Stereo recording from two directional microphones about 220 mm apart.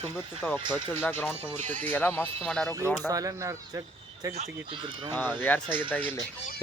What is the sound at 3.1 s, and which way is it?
Speech, 15° right (ahead or behind).